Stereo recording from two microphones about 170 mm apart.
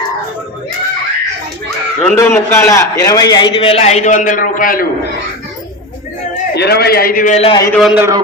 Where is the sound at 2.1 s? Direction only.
15° left (ahead or behind); by 4.9 s 55° left (ahead or behind).